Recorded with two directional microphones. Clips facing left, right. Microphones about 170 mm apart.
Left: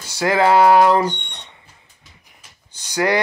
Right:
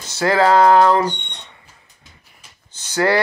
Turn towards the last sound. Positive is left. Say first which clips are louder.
# right 1 dB
turn(degrees=15)  # may be behind; listen again after turning